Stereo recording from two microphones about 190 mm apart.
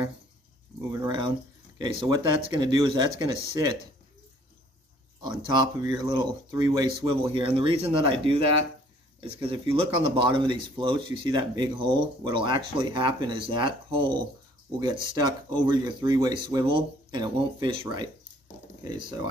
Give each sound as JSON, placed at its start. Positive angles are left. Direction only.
{"t": 0.9, "sound": "a sound", "side_deg": -25}
{"t": 1.8, "sound": "speech", "side_deg": -20}
{"t": 5.2, "sound": "speech", "side_deg": -25}
{"t": 9.4, "sound": "speech", "side_deg": -30}